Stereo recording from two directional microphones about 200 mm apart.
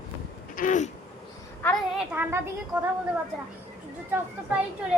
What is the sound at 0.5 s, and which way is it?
Speech, 40° left (ahead or behind).